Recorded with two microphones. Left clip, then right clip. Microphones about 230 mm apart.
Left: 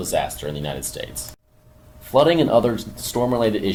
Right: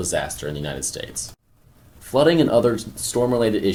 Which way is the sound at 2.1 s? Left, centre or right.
Right.